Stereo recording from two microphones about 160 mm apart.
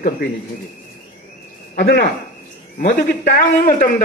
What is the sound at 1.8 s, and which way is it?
Speech, 75° left (ahead or behind).